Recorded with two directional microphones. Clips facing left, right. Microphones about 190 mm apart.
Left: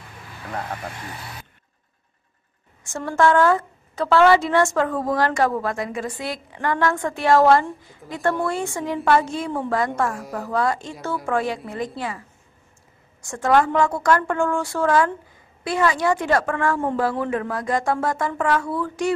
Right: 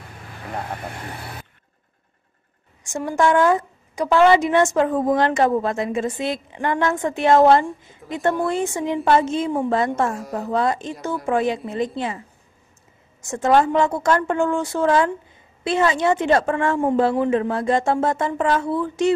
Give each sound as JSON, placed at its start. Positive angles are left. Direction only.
{"t": 2.8, "sound": "a woman's voice", "side_deg": -15}
{"t": 13.2, "sound": "a woman's voice", "side_deg": -20}